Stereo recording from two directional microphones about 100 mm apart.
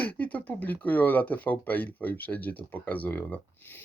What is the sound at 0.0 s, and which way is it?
Speech, 15° left (ahead or behind).